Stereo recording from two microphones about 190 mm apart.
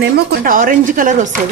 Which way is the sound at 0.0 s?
50° right (ahead or behind).